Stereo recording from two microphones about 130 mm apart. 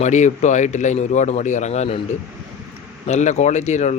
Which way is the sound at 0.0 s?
65° left (ahead or behind).